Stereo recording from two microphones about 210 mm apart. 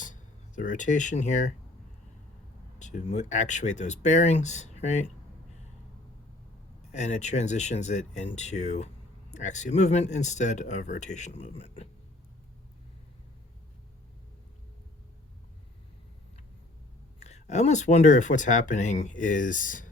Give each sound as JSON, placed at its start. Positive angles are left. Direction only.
{"t": 0.0, "sound": "speech", "side_deg": 35}
{"t": 2.7, "sound": "speech", "side_deg": 35}
{"t": 6.9, "sound": "speech", "side_deg": 35}
{"t": 17.2, "sound": "speech", "side_deg": 30}